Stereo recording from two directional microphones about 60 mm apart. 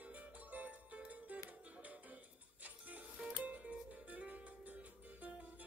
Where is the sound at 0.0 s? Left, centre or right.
Right.